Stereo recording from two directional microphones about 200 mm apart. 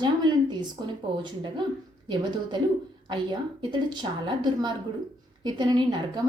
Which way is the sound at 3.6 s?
20° right (ahead or behind).